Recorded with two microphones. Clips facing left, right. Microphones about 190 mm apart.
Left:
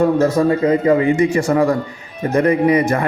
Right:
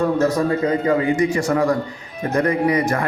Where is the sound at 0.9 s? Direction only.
25° left (ahead or behind).